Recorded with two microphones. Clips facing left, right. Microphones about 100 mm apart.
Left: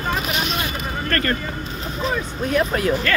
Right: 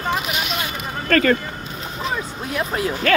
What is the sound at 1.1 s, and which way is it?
Speech, 90° right.